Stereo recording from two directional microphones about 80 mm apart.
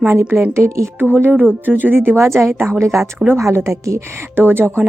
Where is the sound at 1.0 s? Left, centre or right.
Right.